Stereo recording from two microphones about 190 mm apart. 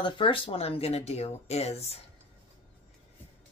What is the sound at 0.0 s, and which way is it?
Speech, 25° left (ahead or behind).